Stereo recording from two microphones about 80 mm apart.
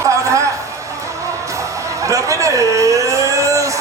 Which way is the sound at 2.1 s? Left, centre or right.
Right.